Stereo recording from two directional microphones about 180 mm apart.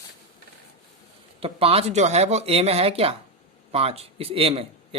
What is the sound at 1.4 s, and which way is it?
A man's voice, 30° right (ahead or behind).